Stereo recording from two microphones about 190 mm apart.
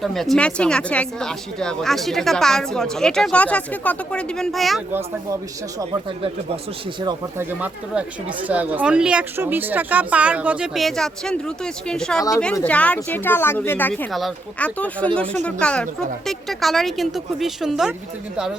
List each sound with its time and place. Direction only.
0.0 s speech: centre (ahead or behind)
4.9 s speech: 10° right (ahead or behind)
7.0 s speech: 20° right (ahead or behind)
7.6 s speech: 10° right (ahead or behind)